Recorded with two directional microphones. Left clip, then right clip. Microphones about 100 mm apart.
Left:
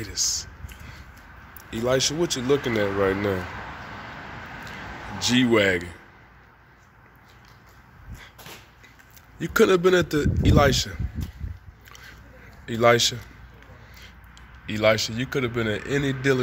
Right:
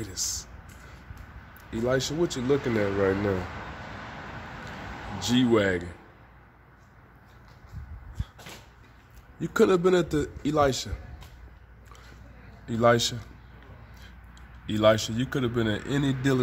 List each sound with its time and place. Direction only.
0.0 s a man's voice: 15° right (ahead or behind)
1.6 s a man's voice: centre (ahead or behind)
5.2 s a man's voice: centre (ahead or behind)
9.4 s a man's voice: centre (ahead or behind)
12.6 s a man's voice: 5° right (ahead or behind)
14.7 s speech: 30° right (ahead or behind)